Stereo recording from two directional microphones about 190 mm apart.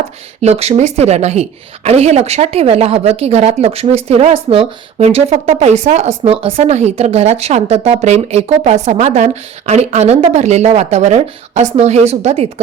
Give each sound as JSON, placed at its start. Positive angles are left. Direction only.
{"t": 0.4, "sound": "a woman's voice", "side_deg": -35}